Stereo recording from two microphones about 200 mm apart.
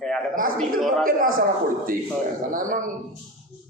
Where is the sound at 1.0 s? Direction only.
45° right (ahead or behind).